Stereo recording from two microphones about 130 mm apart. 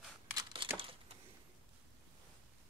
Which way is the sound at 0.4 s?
40° right (ahead or behind).